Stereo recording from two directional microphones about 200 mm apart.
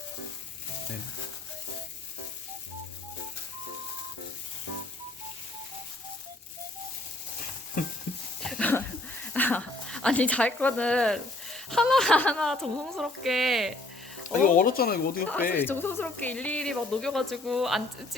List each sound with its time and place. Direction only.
8.4 s dog: 5° left (ahead or behind)
9.3 s speech: 10° left (ahead or behind)
14.4 s speech: 45° left (ahead or behind)
15.5 s speech: 10° left (ahead or behind)